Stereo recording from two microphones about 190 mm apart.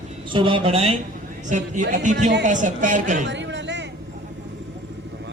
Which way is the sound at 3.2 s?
70° right (ahead or behind).